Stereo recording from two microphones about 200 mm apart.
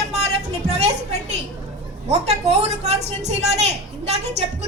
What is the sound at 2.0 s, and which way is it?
A woman's voice, 35° right (ahead or behind).